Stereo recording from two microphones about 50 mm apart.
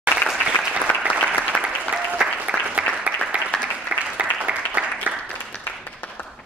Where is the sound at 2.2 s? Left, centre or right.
Right.